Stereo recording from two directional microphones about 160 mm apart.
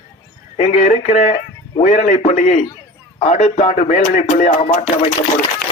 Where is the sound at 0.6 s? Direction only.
45° left (ahead or behind).